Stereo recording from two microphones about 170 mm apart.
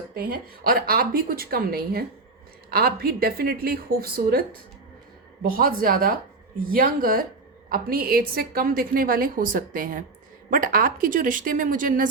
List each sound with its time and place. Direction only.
0.1 s a woman's voice: 60° right (ahead or behind)